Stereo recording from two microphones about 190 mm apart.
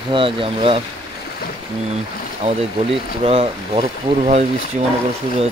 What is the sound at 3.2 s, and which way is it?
Speech, 30° right (ahead or behind).